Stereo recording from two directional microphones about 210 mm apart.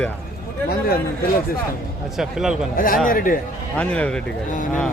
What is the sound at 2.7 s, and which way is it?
Speech, 40° left (ahead or behind).